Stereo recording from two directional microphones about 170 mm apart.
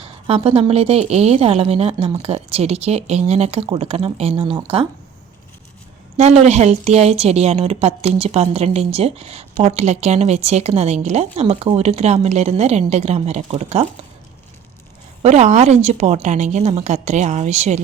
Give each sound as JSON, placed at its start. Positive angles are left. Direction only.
{"t": 0.0, "sound": "a woman's voice", "side_deg": -35}
{"t": 6.1, "sound": "a woman's voice", "side_deg": -40}
{"t": 15.2, "sound": "a woman's voice", "side_deg": -40}